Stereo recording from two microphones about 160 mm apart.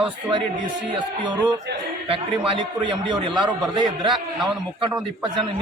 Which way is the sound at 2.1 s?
30° right (ahead or behind).